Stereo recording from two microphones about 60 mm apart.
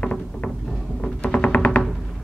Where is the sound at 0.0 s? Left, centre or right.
Centre.